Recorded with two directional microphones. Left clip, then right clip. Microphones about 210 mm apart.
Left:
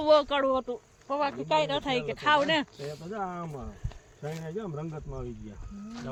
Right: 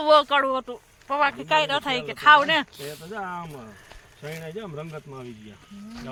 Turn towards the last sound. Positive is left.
turn(degrees=35)  # may be behind; listen again after turning